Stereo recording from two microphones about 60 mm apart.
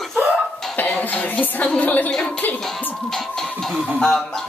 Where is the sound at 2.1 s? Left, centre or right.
Centre.